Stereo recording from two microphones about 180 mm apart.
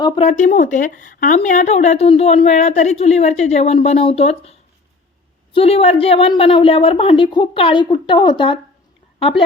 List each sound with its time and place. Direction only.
0.0 s speech: 35° left (ahead or behind)
5.5 s a woman's voice: 35° left (ahead or behind)